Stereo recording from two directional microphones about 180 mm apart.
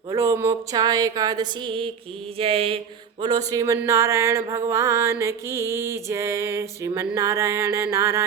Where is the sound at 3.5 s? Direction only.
20° right (ahead or behind).